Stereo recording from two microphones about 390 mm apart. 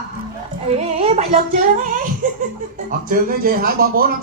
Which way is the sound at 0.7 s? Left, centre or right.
Centre.